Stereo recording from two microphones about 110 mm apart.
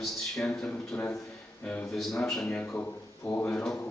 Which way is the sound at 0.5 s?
5° left (ahead or behind).